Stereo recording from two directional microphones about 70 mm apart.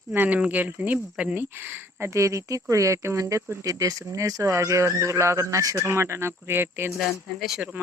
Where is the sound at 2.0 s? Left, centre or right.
Right.